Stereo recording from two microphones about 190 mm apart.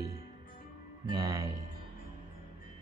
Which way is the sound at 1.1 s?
15° right (ahead or behind).